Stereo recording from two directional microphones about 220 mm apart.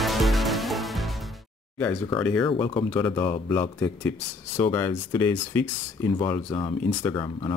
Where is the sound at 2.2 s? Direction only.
5° left (ahead or behind).